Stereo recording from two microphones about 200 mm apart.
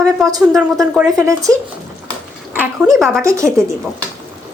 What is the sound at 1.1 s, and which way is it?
Speech, 15° right (ahead or behind).